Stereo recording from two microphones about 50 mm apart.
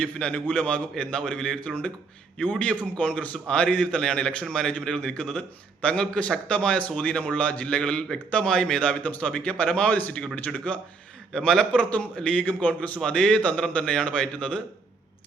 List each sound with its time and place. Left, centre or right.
0.0 s a man's voice: left
11.3 s a man's voice: centre